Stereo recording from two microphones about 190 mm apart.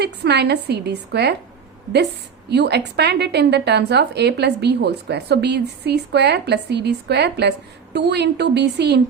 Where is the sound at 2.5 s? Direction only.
60° right (ahead or behind).